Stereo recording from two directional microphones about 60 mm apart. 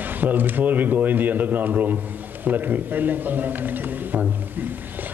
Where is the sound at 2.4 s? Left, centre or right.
Right.